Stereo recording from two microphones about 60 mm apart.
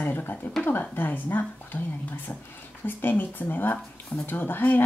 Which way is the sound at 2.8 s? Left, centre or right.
Left.